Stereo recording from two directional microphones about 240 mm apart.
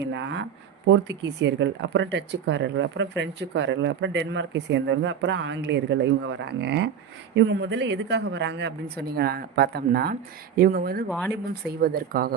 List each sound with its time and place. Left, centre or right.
0.0 s speech: right